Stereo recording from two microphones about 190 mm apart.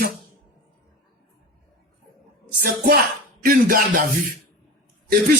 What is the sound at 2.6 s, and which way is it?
Speech, 50° right (ahead or behind).